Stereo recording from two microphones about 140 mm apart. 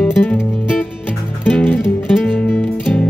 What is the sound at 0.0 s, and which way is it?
Music, 10° left (ahead or behind).